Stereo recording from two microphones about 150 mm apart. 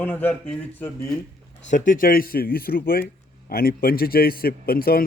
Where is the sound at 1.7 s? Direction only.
65° left (ahead or behind).